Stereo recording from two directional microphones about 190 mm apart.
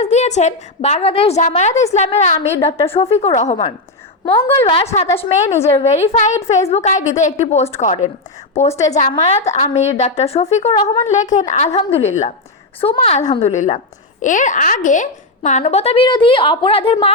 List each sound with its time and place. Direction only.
0.0 s a woman's voice: 35° left (ahead or behind)